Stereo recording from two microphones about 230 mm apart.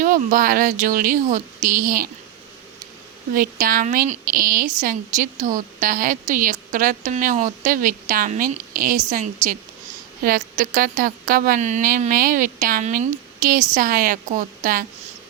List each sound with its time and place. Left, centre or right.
0.0 s a woman's voice: right
3.3 s a woman's voice: right